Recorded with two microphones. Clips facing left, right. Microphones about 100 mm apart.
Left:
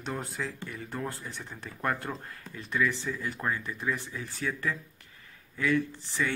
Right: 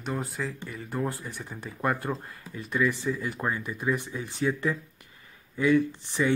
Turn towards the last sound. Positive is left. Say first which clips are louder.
# right 5 dB
turn(degrees=-15)  # may be behind; listen again after turning